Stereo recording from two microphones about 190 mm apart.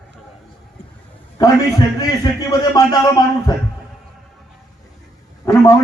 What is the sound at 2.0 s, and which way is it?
A man's voice, 20° left (ahead or behind).